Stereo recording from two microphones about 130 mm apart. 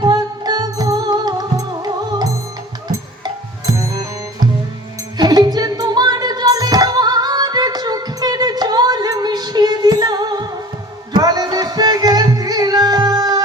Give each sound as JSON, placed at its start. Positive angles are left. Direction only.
{"t": 0.0, "sound": "music", "side_deg": -30}
{"t": 3.2, "sound": "music", "side_deg": -30}